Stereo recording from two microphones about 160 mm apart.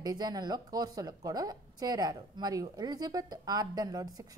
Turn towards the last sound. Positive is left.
turn(degrees=-25)  # may be behind; listen again after turning